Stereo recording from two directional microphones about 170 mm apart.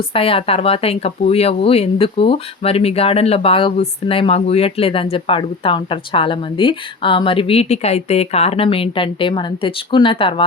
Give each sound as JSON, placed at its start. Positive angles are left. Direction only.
{"t": 0.1, "sound": "a woman's voice", "side_deg": 35}